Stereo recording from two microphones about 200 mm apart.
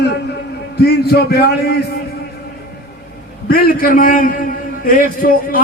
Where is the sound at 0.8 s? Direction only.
55° left (ahead or behind).